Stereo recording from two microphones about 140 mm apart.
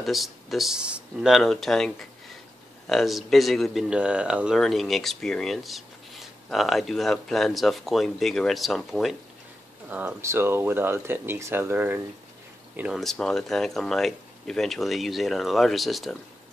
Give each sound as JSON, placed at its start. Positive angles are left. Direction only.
{"t": 0.0, "sound": "speech", "side_deg": 0}
{"t": 9.8, "sound": "speech", "side_deg": -10}